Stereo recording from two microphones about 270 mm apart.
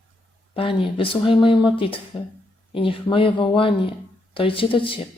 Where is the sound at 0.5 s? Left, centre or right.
Centre.